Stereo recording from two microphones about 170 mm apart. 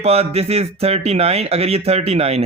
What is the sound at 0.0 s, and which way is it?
Speech, 35° right (ahead or behind).